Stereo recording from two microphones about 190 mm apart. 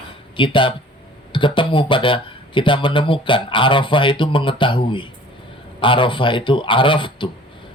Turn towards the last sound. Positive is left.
turn(degrees=25)  # may be behind; listen again after turning